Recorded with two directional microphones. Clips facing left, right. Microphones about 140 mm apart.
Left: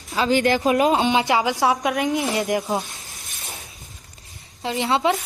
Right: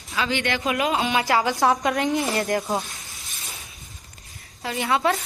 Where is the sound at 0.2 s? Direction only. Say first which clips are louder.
Left 6 dB; 40° left (ahead or behind); by 1.7 s 15° left (ahead or behind).